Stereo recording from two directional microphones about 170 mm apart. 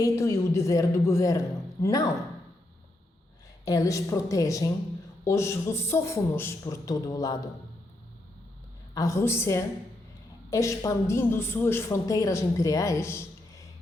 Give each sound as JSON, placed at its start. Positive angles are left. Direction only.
{"t": 0.0, "sound": "a man's voice", "side_deg": 15}
{"t": 3.7, "sound": "a woman's voice", "side_deg": 20}
{"t": 9.0, "sound": "a woman's voice", "side_deg": 15}